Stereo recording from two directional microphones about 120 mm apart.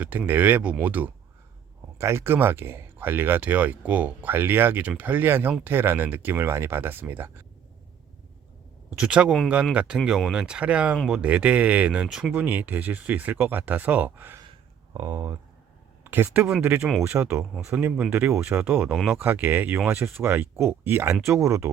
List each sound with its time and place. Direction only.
0.0 s speech: 15° right (ahead or behind)
9.0 s speech: 10° right (ahead or behind)
14.9 s speech: 30° right (ahead or behind); by 16.9 s 10° right (ahead or behind)
17.1 s speech: 20° right (ahead or behind)